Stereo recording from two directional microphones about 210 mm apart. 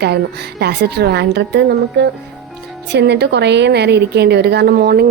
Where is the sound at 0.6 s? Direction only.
50° right (ahead or behind).